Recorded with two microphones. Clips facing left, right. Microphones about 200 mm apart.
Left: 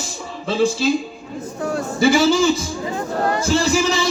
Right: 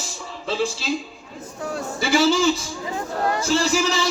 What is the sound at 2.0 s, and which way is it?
A man's voice, 45° left (ahead or behind).